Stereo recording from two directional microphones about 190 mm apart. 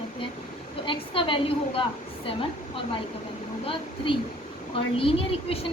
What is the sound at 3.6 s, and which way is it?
A woman's voice, 30° left (ahead or behind).